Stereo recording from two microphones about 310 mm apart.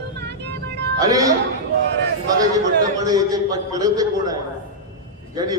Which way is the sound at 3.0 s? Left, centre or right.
Centre.